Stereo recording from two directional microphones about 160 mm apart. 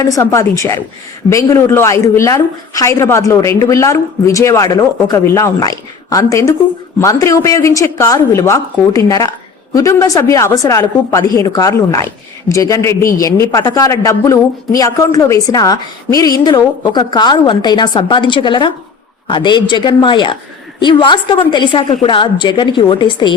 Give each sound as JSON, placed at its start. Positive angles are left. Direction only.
{"t": 0.0, "sound": "speech", "side_deg": 20}